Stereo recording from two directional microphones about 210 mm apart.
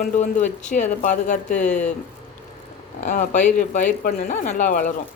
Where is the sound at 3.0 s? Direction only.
35° left (ahead or behind).